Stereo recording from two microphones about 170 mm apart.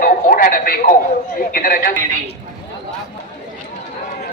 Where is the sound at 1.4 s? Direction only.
60° left (ahead or behind).